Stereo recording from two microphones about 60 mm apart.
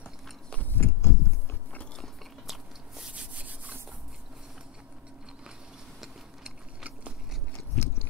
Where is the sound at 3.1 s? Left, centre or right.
Right.